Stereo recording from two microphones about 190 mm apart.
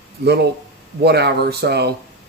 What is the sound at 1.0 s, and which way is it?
Speech, 60° right (ahead or behind).